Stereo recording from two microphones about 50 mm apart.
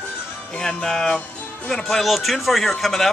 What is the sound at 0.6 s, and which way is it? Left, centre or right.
Music, centre.